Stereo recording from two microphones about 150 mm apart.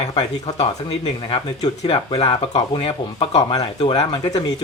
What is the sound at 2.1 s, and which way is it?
Speech, 40° left (ahead or behind).